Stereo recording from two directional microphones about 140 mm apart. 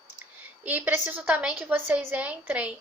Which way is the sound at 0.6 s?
10° right (ahead or behind).